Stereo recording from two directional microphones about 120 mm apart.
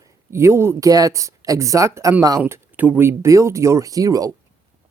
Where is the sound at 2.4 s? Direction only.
15° right (ahead or behind); by 4.3 s 30° right (ahead or behind).